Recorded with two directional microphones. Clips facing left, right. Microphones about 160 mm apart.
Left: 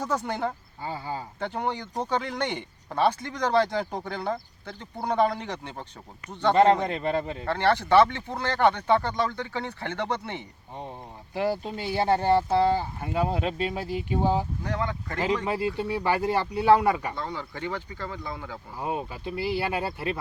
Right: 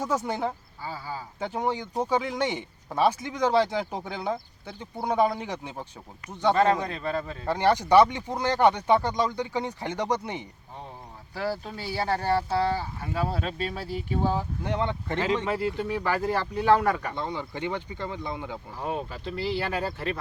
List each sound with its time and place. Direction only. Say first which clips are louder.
0.0 s speech: right 1 dB; 5° right (ahead or behind)
0.8 s speech: left 6 dB; 20° left (ahead or behind)
1.4 s speech: right 3 dB; 10° right (ahead or behind)
6.5 s speech: left 3 dB; 20° left (ahead or behind)
7.4 s speech: right 2 dB; 15° right (ahead or behind)
11.3 s speech: left 4 dB; 20° left (ahead or behind)
14.6 s speech: right 2 dB; 25° right (ahead or behind)
15.4 s speech: even; 15° left (ahead or behind)
17.2 s speech: right 2 dB; 20° right (ahead or behind)
18.8 s speech: left 1 dB; 15° left (ahead or behind)